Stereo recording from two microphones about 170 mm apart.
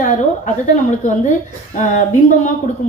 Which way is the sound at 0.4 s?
45° left (ahead or behind).